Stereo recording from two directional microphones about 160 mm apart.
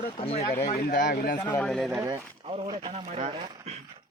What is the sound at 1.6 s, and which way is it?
Speech, 5° left (ahead or behind).